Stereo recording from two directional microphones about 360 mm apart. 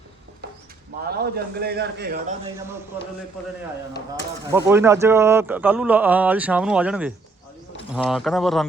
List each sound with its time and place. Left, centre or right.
1.0 s a man's voice: right
4.5 s speech: centre